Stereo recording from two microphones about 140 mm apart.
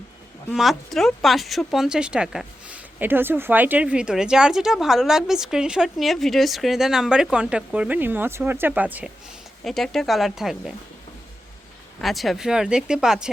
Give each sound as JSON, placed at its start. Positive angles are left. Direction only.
{"t": 0.5, "sound": "speech", "side_deg": 0}
{"t": 9.6, "sound": "speech", "side_deg": 0}
{"t": 11.9, "sound": "speech", "side_deg": 0}